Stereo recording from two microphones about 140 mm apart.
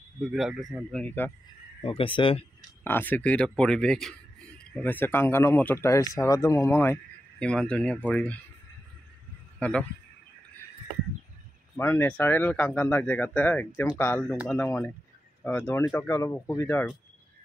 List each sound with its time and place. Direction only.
0.2 s speech: 5° right (ahead or behind)
1.8 s speech: 40° left (ahead or behind)
2.8 s speech: 15° left (ahead or behind)
9.6 s a man's voice: 10° left (ahead or behind)
11.7 s speech: 15° left (ahead or behind)